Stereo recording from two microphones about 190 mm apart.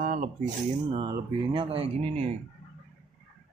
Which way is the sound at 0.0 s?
40° right (ahead or behind).